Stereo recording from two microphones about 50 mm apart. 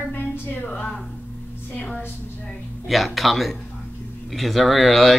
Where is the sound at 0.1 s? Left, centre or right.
Left.